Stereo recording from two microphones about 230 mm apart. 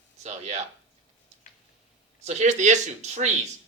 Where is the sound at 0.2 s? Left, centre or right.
Right.